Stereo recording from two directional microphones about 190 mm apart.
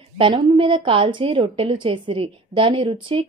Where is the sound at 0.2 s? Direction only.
25° right (ahead or behind).